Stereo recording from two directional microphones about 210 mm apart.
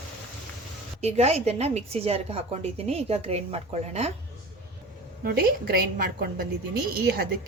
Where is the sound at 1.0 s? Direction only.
30° right (ahead or behind).